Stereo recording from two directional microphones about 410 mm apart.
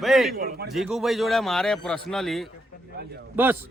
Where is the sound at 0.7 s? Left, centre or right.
Centre.